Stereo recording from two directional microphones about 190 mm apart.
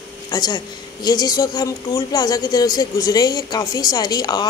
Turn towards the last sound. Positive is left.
turn(degrees=20)  # may be behind; listen again after turning